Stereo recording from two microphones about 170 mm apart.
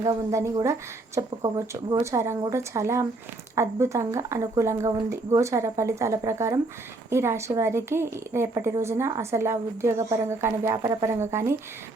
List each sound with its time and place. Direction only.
0.0 s a woman's voice: 20° right (ahead or behind)